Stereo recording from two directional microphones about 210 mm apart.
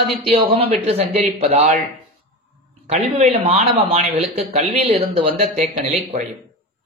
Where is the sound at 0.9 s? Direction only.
30° right (ahead or behind).